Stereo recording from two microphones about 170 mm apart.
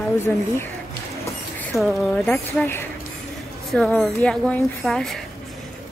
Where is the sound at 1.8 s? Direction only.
Centre (ahead or behind).